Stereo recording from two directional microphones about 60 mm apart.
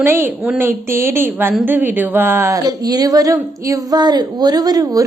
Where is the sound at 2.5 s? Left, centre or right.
Right.